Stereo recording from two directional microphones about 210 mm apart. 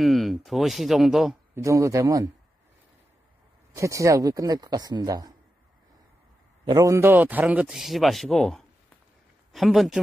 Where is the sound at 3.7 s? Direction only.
15° right (ahead or behind).